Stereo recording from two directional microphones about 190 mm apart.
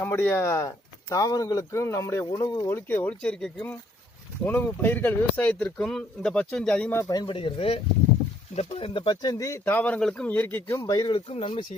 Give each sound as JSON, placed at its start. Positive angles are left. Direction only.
{"t": 0.0, "sound": "speech", "side_deg": 10}